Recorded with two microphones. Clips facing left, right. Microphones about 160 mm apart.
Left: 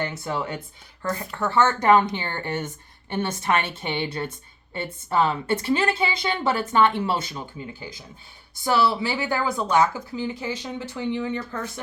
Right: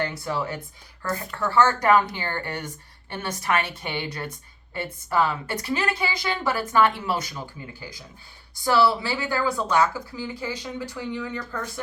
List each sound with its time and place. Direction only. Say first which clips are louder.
0.0 s speech: even; 25° left (ahead or behind)